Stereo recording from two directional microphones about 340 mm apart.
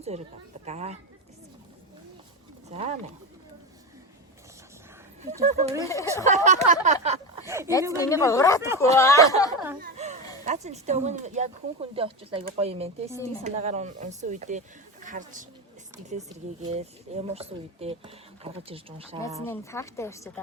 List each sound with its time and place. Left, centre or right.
0.0 s speech: centre
2.6 s speech: centre
5.5 s speech: centre
5.8 s a woman's voice: centre
6.2 s speech: right
7.4 s speech: centre
7.9 s a woman's voice: centre
9.8 s a sound: right
10.4 s speech: centre
19.5 s a woman's voice: centre